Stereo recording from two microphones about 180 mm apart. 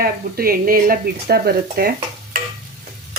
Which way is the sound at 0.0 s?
55° right (ahead or behind).